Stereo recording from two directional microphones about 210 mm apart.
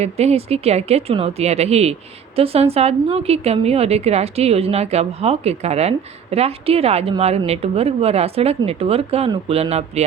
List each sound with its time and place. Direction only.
0.0 s speech: 30° right (ahead or behind)